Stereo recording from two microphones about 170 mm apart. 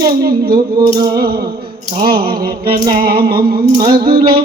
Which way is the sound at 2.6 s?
30° right (ahead or behind).